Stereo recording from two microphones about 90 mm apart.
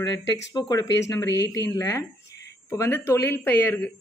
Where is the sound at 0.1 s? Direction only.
40° left (ahead or behind).